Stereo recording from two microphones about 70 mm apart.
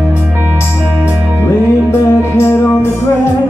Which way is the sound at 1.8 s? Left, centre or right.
Left.